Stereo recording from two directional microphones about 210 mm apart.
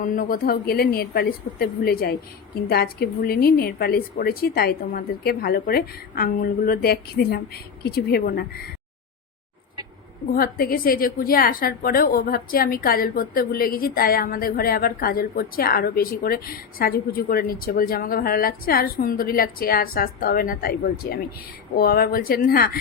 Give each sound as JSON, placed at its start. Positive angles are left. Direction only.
{"t": 0.0, "sound": "a woman's voice", "side_deg": 40}
{"t": 10.3, "sound": "a woman's voice", "side_deg": 45}